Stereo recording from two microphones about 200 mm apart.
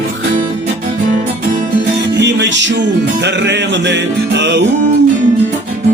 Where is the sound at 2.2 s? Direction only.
65° right (ahead or behind).